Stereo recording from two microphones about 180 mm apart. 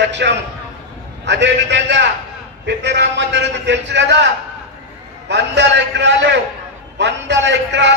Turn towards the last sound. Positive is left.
turn(degrees=-75)  # may be behind; listen again after turning